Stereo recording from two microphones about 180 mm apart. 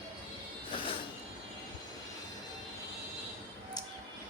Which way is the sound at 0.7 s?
30° left (ahead or behind).